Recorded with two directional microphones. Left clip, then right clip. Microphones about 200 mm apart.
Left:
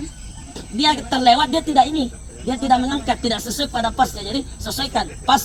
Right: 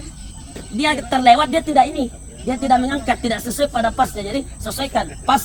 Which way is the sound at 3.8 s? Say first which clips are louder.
Left 2 dB; 20° right (ahead or behind).